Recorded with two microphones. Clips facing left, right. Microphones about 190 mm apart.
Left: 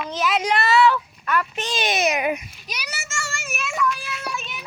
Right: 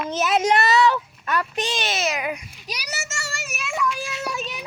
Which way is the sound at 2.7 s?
40° right (ahead or behind).